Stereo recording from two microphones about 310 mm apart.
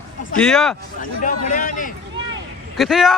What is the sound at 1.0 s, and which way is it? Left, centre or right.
Speech, left.